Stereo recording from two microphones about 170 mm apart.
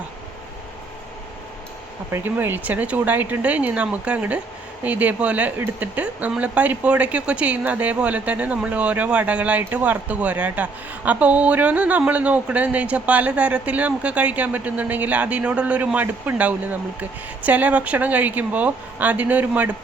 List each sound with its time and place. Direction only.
2.1 s speech: 10° right (ahead or behind)